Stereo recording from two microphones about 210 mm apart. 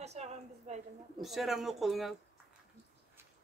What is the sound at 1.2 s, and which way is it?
Speech, centre (ahead or behind).